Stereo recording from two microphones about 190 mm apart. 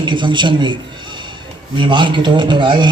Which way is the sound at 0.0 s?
25° right (ahead or behind).